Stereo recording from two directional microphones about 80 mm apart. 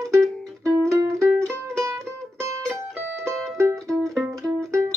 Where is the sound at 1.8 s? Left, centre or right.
Right.